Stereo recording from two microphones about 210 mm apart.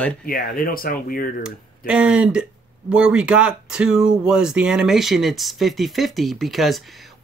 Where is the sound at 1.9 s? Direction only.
5° right (ahead or behind).